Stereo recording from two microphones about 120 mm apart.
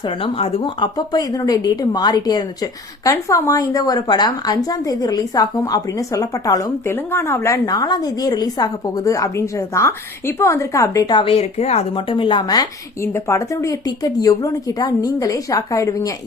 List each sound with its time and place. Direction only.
0.0 s a woman's voice: 50° left (ahead or behind); by 11.1 s 25° left (ahead or behind)
11.1 s a woman's voice: 50° left (ahead or behind)
11.9 s a woman's voice: 45° left (ahead or behind)
13.0 s speech: 20° left (ahead or behind)